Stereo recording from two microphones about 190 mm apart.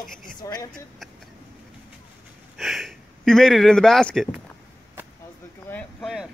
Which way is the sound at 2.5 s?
Centre (ahead or behind).